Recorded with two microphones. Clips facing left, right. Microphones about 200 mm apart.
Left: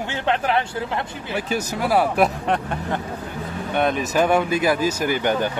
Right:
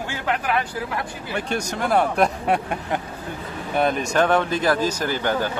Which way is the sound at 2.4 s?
10° right (ahead or behind).